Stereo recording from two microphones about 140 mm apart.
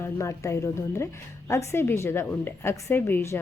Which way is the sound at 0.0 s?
20° left (ahead or behind).